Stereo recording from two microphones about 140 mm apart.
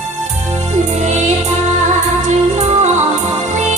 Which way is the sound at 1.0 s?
60° right (ahead or behind).